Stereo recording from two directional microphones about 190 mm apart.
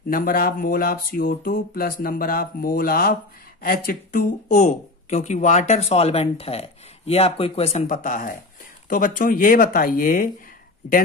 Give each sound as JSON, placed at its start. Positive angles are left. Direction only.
{"t": 0.1, "sound": "speech", "side_deg": 50}
{"t": 7.8, "sound": "speech", "side_deg": 45}